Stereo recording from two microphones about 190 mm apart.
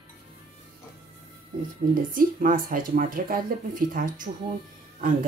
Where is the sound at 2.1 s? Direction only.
45° right (ahead or behind).